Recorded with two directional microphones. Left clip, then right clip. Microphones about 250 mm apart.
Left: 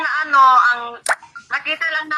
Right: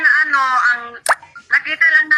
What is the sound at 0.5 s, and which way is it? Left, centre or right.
Speech, centre.